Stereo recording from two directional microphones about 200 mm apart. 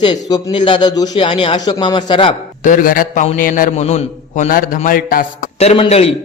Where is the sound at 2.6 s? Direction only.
40° left (ahead or behind).